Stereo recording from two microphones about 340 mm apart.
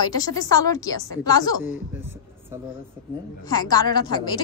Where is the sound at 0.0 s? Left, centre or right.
Centre.